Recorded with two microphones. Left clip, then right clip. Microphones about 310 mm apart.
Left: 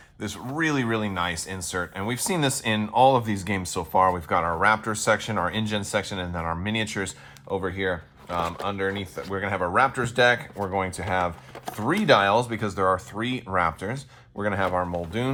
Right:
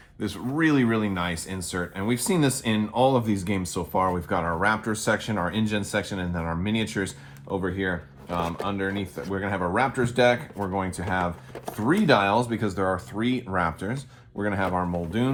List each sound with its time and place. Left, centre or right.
0.2 s speech: centre